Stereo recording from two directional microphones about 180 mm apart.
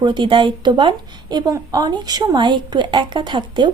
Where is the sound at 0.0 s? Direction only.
25° right (ahead or behind).